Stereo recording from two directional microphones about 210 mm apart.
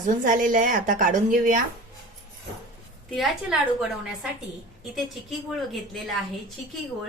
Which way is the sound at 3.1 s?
Centre (ahead or behind).